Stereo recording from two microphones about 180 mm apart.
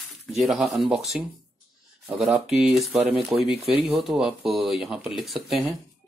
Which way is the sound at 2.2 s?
Centre (ahead or behind).